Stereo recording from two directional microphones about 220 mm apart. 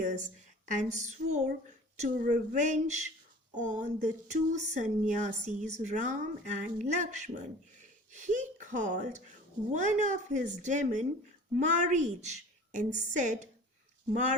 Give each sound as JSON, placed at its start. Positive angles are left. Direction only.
{"t": 0.0, "sound": "speech", "side_deg": -35}